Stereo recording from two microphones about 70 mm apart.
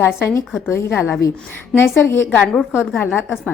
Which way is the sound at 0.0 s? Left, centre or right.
Left.